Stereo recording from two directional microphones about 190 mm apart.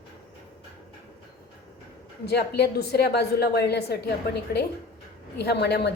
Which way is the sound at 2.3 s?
55° left (ahead or behind).